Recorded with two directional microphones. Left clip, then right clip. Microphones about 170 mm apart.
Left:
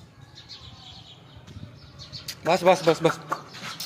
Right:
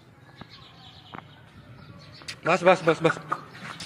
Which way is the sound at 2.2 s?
15° left (ahead or behind).